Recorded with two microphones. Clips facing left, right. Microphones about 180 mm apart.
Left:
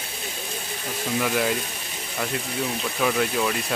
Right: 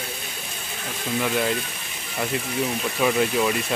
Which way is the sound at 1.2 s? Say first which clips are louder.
Even; centre (ahead or behind).